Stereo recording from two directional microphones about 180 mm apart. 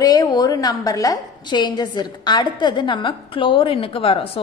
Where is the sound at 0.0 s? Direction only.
20° left (ahead or behind).